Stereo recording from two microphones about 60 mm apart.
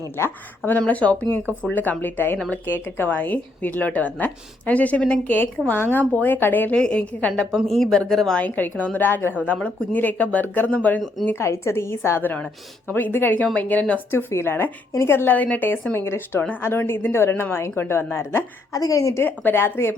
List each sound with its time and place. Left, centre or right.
0.6 s a woman's voice: left
5.4 s a woman's voice: left
6.7 s a woman's voice: centre
7.5 s speech: centre
8.4 s a woman's voice: left
11.3 s a woman's voice: left
14.1 s a woman's voice: left
15.4 s a woman's voice: left
15.9 s a woman's voice: left
18.7 s a woman's voice: left
19.2 s a woman's voice: left